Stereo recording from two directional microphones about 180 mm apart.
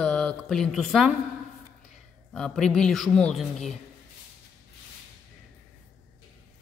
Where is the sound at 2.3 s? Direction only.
5° left (ahead or behind).